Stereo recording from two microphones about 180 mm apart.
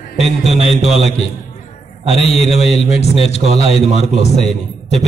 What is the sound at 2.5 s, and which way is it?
Speech, 35° left (ahead or behind).